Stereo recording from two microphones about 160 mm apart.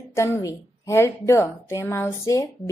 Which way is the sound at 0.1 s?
20° left (ahead or behind).